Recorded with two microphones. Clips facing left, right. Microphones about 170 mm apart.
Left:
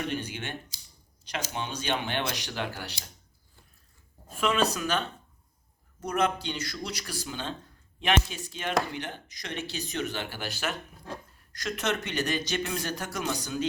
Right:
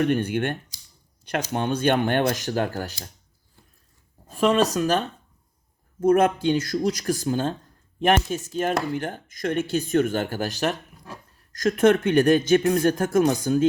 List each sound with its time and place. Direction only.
0.0 s speech: 55° right (ahead or behind)
4.4 s speech: 40° right (ahead or behind)